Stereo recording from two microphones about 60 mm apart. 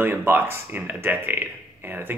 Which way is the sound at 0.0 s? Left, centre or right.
Right.